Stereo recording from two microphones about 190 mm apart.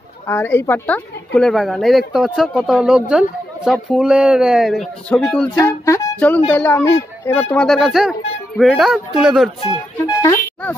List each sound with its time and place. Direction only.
0.3 s speech: 10° left (ahead or behind)
5.7 s music: 10° left (ahead or behind)
6.5 s speech: 10° left (ahead or behind)
9.6 s speech: 25° left (ahead or behind)